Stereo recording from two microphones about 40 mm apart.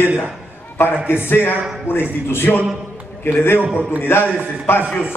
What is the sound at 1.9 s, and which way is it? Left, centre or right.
Speech, left.